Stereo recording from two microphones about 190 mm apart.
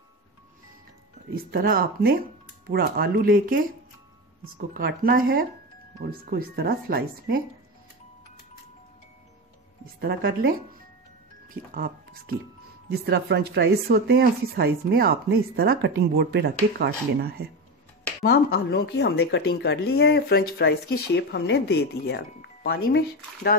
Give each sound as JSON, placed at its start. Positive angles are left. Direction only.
{"t": 1.3, "sound": "speech", "side_deg": -50}
{"t": 4.6, "sound": "speech", "side_deg": -55}
{"t": 9.9, "sound": "speech", "side_deg": -55}
{"t": 12.8, "sound": "speech", "side_deg": -60}
{"t": 18.2, "sound": "speech", "side_deg": 60}